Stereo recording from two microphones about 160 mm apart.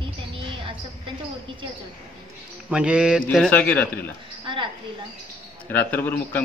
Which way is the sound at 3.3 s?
10° left (ahead or behind).